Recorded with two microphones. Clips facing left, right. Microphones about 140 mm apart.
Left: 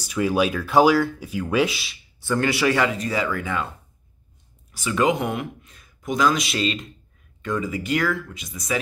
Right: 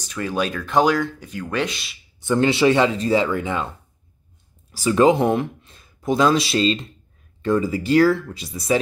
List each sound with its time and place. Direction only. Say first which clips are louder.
0.0 s speech: left 3 dB; 10° left (ahead or behind)
2.1 s speech: right 4 dB; 20° right (ahead or behind)
4.7 s speech: right 6 dB; 35° right (ahead or behind)